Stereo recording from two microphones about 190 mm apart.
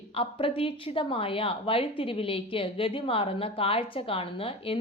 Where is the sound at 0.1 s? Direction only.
30° left (ahead or behind).